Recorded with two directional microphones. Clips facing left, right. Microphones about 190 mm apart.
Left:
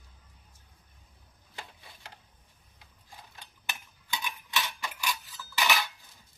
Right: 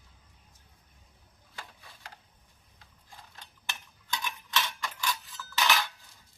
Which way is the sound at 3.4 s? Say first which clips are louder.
Left 1 dB; 15° left (ahead or behind).